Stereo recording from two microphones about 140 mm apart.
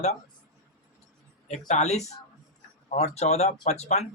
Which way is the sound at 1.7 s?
55° left (ahead or behind).